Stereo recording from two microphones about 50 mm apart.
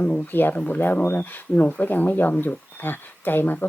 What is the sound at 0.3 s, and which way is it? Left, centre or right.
Speech, left.